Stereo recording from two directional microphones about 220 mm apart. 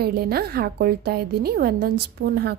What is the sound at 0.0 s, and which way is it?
A woman's voice, 45° right (ahead or behind).